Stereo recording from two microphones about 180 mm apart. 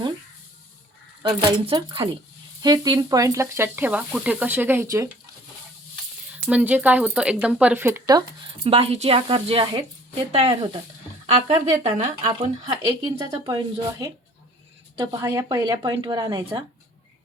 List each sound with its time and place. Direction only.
1.2 s speech: 30° right (ahead or behind)
6.3 s speech: 10° right (ahead or behind)
8.6 s a woman's voice: 35° right (ahead or behind)
12.4 s speech: 25° right (ahead or behind)